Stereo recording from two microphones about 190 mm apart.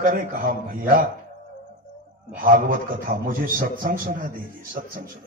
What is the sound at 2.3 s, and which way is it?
A man's voice, 45° right (ahead or behind).